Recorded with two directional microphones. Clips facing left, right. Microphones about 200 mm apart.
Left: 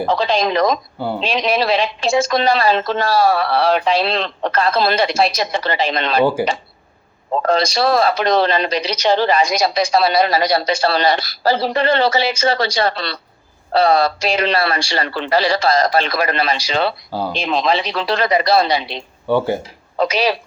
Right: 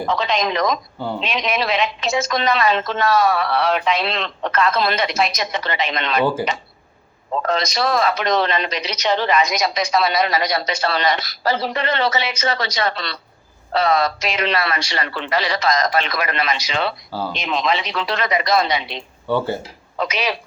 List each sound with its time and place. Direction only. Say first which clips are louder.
0.0 s speech: left 4 dB; 30° left (ahead or behind)
7.4 s speech: left 5 dB; 30° left (ahead or behind)
17.1 s speech: left 3 dB; 15° left (ahead or behind)
17.3 s speech: left 4 dB; 35° left (ahead or behind)
19.3 s speech: left 4 dB; 15° left (ahead or behind)
20.0 s speech: left 6 dB; 35° left (ahead or behind)